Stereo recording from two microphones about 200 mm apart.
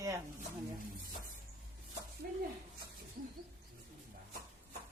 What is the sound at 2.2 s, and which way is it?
Speech, 45° right (ahead or behind).